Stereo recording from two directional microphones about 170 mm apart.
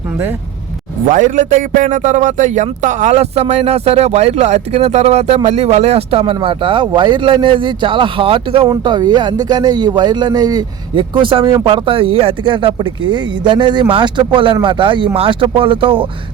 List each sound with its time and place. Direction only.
1.0 s a man's voice: 50° right (ahead or behind); by 16.0 s 30° right (ahead or behind)